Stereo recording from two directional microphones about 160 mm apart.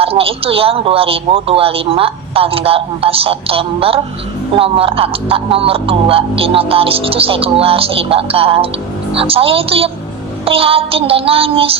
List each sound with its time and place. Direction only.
0.0 s speech: 35° right (ahead or behind)